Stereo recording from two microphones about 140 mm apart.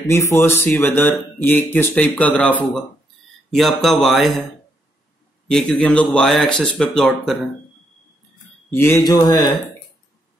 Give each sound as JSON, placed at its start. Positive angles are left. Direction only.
{"t": 0.0, "sound": "speech", "side_deg": 20}
{"t": 5.5, "sound": "speech", "side_deg": 5}
{"t": 8.6, "sound": "mantra", "side_deg": 15}
{"t": 9.0, "sound": "speech", "side_deg": 25}